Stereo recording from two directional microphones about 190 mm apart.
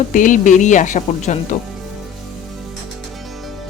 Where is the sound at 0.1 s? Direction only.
45° left (ahead or behind).